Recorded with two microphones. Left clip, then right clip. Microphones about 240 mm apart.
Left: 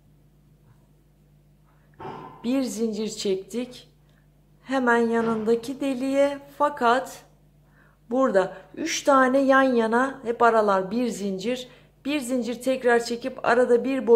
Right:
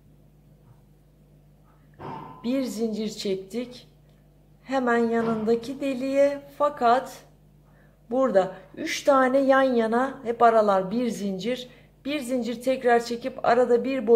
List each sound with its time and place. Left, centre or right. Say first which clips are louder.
2.4 s a woman's voice: left 1 dB; centre